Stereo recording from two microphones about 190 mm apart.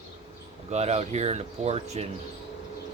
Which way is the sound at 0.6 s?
35° right (ahead or behind).